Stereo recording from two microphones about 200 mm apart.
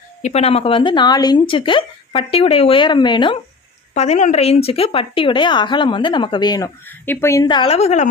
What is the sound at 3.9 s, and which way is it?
A woman's voice, 35° left (ahead or behind).